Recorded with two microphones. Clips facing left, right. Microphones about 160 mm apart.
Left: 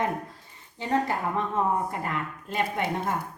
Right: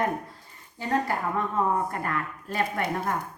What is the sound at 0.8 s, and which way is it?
A woman's voice, 20° left (ahead or behind).